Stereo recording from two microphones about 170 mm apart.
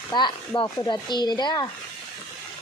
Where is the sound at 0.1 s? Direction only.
25° left (ahead or behind).